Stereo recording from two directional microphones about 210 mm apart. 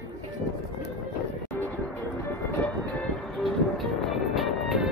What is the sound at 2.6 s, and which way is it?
Music, 5° left (ahead or behind).